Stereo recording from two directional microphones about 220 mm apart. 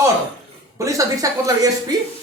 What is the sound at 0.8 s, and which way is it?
Speech, 15° right (ahead or behind).